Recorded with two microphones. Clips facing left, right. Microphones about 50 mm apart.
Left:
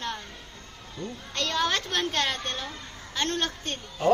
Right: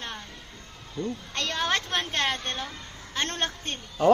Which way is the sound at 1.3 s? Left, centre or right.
Right.